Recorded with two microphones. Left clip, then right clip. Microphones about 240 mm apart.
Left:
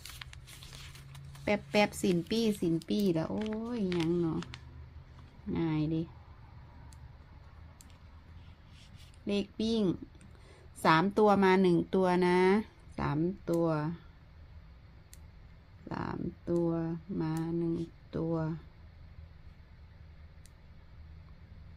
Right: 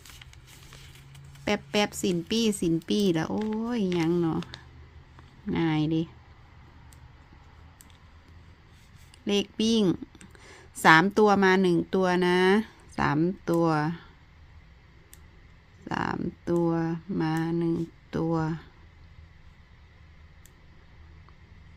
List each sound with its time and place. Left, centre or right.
0.2 s a sound: centre
1.5 s a woman's voice: centre
5.5 s a woman's voice: right
9.2 s speech: right
15.9 s speech: right